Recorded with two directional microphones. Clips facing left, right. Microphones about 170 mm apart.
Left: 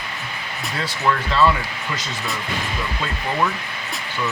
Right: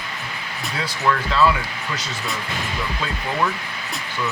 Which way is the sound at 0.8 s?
5° right (ahead or behind).